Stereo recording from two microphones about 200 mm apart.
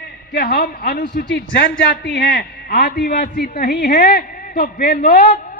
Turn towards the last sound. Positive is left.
turn(degrees=40)  # may be behind; listen again after turning